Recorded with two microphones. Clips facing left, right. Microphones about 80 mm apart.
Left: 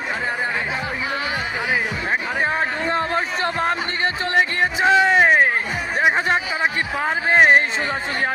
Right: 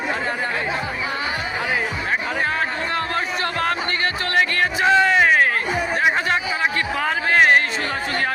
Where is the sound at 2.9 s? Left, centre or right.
Left.